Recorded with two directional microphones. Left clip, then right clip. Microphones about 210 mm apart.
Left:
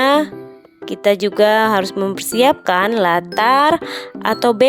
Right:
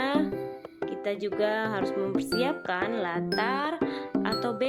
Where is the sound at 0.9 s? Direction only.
50° left (ahead or behind).